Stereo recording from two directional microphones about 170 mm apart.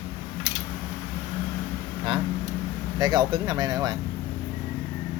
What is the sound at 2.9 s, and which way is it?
Speech, 25° right (ahead or behind).